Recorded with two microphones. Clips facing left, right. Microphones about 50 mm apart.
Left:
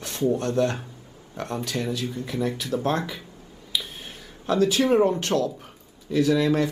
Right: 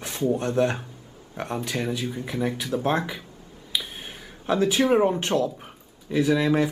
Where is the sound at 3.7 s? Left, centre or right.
Centre.